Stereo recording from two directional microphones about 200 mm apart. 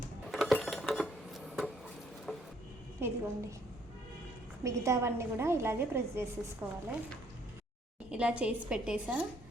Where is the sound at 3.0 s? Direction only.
15° right (ahead or behind).